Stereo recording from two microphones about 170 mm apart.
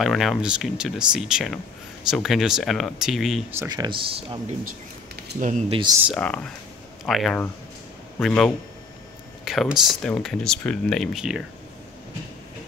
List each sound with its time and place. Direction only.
0.0 s speech: centre (ahead or behind)
3.5 s speech: 20° right (ahead or behind)
5.4 s speech: 45° right (ahead or behind)
5.7 s speech: 30° right (ahead or behind)
6.1 s speech: 5° left (ahead or behind)